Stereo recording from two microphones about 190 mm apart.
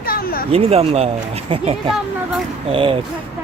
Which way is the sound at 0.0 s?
50° left (ahead or behind).